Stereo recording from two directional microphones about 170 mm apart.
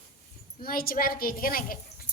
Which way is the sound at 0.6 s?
60° left (ahead or behind).